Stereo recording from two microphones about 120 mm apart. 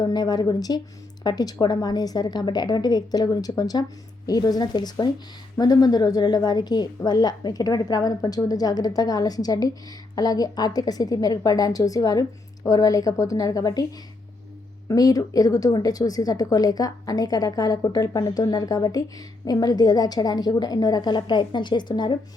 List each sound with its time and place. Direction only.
0.0 s a woman's voice: 35° left (ahead or behind)
14.8 s a woman's voice: 30° left (ahead or behind)